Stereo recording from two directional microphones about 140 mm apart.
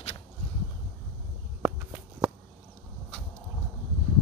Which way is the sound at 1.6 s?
15° right (ahead or behind).